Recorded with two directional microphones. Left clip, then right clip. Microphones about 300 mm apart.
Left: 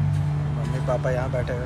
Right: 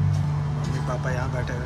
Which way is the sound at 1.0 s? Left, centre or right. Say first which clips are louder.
Left 4 dB; centre.